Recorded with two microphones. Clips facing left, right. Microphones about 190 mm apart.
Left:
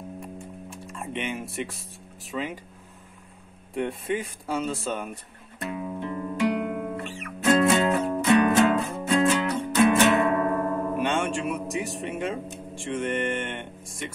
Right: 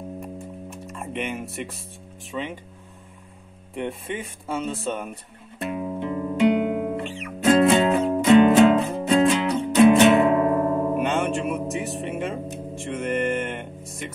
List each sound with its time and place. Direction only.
0.9 s music: centre (ahead or behind)
1.6 s speech: centre (ahead or behind)
3.7 s speech: centre (ahead or behind)
5.6 s guitar: 30° right (ahead or behind)
11.0 s music: centre (ahead or behind)
12.1 s speech: centre (ahead or behind)